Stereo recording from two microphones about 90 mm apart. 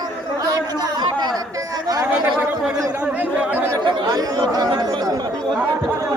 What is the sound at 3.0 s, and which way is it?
Speech, 15° right (ahead or behind).